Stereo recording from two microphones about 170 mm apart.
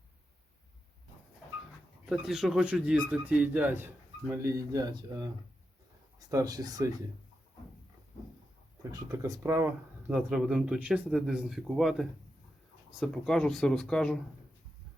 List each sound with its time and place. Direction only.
2.0 s speech: 5° right (ahead or behind); by 6.9 s 20° right (ahead or behind)
8.9 s speech: 20° right (ahead or behind); by 14.2 s 5° left (ahead or behind)